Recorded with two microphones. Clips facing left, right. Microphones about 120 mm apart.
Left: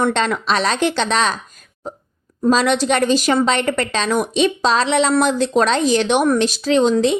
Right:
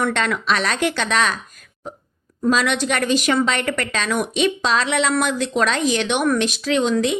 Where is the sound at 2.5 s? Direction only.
35° left (ahead or behind).